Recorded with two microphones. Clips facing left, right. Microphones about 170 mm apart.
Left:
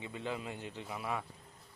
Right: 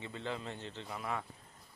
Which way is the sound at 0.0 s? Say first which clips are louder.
Left 1 dB; 15° left (ahead or behind).